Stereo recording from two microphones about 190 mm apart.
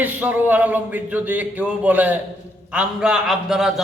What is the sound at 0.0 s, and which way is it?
A man's voice, 10° right (ahead or behind).